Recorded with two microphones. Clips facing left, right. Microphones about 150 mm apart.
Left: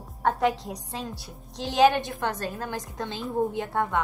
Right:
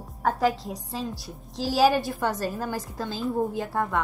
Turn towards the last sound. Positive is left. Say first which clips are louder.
# even
turn(degrees=0)  # may be behind; listen again after turning